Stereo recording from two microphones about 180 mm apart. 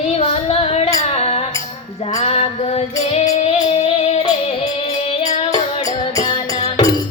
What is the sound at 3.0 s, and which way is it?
Female singing, 40° left (ahead or behind).